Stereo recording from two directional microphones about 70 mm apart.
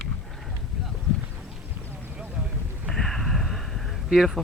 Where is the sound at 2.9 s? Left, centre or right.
Centre.